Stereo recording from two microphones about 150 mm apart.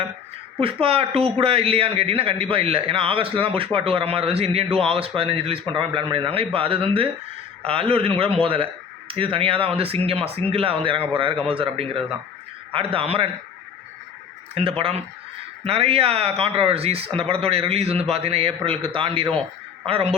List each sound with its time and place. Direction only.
0.6 s speech: 40° right (ahead or behind)
14.5 s speech: 40° right (ahead or behind)